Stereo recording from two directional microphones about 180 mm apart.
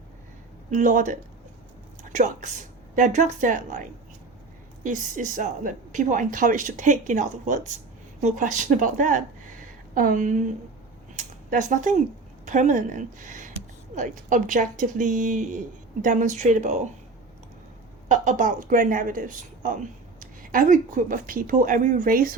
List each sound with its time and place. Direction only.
0.7 s speech: 45° right (ahead or behind)
2.1 s speech: 45° right (ahead or behind)
18.1 s speech: 45° right (ahead or behind)